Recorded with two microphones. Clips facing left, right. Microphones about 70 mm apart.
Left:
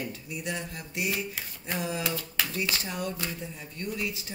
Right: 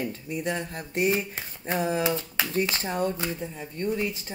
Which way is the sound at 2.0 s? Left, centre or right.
Right.